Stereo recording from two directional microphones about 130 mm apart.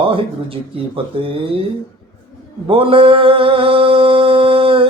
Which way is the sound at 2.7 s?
45° right (ahead or behind).